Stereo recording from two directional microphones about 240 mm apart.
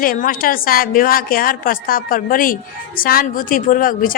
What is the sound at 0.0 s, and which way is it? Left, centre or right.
A woman's voice, left.